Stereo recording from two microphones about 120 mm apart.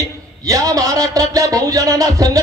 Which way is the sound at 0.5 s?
30° right (ahead or behind).